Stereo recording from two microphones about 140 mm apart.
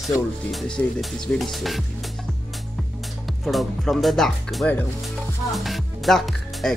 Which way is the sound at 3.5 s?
Centre (ahead or behind).